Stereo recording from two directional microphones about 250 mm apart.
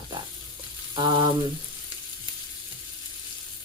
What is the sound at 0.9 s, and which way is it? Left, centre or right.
Frying, centre.